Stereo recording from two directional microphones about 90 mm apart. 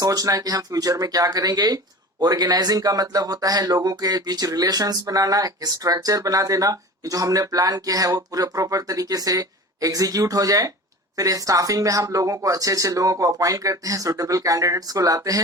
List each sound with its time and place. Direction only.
0.0 s speech: 45° right (ahead or behind)